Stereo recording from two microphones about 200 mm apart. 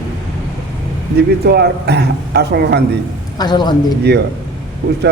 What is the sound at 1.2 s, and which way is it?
A man's voice, 55° right (ahead or behind).